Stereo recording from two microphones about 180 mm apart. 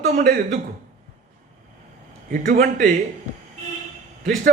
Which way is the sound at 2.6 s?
45° right (ahead or behind).